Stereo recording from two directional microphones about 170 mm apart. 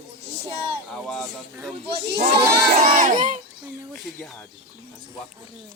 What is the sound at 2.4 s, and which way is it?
Speech, 60° right (ahead or behind).